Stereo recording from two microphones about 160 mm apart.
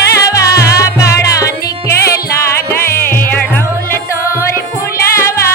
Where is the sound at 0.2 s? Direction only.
20° left (ahead or behind).